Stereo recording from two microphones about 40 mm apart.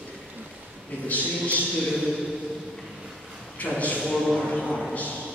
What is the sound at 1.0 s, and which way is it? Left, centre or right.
Speech, left.